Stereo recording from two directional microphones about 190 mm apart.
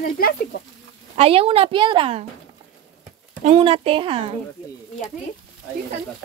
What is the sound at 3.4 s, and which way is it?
Speech, 30° right (ahead or behind).